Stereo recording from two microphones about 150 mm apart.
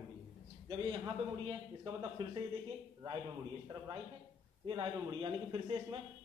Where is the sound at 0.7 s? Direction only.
30° right (ahead or behind).